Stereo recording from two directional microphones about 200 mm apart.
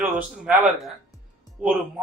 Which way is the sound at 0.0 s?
5° right (ahead or behind).